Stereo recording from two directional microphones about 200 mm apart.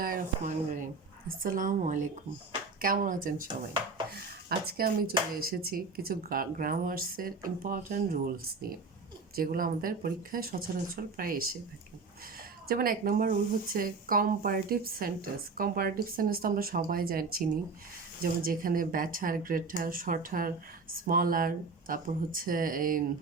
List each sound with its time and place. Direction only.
0.0 s speech: 40° right (ahead or behind)
12.6 s speech: 45° right (ahead or behind)